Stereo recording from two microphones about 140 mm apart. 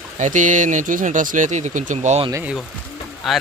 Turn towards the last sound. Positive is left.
turn(degrees=0)  # may be behind; listen again after turning